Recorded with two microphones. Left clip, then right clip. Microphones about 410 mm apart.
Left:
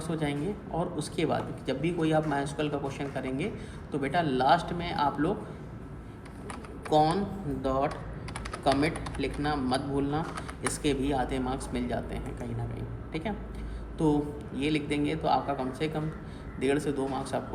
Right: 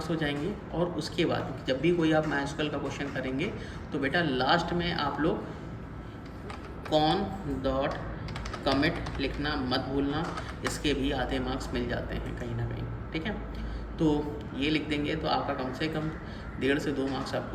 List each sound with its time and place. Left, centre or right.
0.0 s speech: centre
6.9 s speech: centre
14.0 s speech: centre